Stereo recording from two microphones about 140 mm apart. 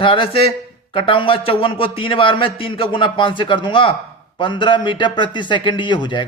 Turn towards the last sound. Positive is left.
turn(degrees=35)  # may be behind; listen again after turning